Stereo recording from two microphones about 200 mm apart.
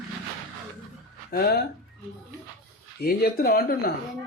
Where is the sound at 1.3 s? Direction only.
50° left (ahead or behind).